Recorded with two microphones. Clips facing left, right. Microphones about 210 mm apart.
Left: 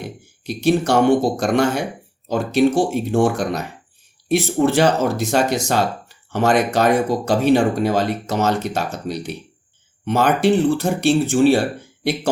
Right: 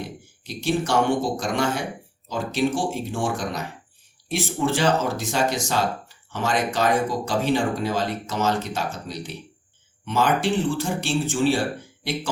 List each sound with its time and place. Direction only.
0.4 s speech: 65° left (ahead or behind)